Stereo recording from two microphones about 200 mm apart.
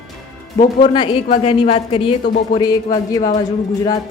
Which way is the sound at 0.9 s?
25° left (ahead or behind).